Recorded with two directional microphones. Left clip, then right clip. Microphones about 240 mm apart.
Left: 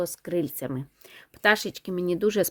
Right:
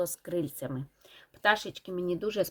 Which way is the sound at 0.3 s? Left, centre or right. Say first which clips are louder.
Left 5 dB; left.